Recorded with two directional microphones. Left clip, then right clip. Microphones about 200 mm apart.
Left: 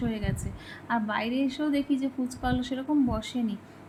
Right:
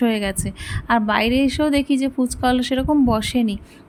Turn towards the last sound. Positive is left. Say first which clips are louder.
# right 11 dB
turn(degrees=-50)  # may be behind; listen again after turning